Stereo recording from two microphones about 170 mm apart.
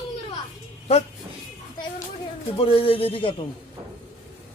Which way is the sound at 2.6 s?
35° left (ahead or behind).